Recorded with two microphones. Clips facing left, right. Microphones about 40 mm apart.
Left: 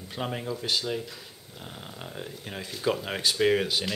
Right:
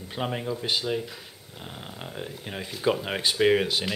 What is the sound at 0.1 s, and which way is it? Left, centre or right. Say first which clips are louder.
Speech: right 2 dB; centre.